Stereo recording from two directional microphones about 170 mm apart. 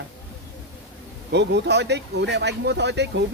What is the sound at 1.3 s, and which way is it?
Speech, 90° right.